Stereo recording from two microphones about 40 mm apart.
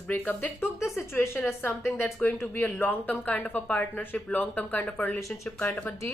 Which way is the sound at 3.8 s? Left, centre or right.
Left.